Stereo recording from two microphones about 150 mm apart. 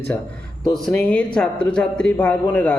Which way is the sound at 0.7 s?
5° left (ahead or behind).